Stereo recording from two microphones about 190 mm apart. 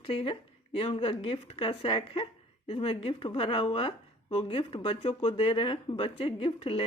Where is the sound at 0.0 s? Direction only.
30° left (ahead or behind).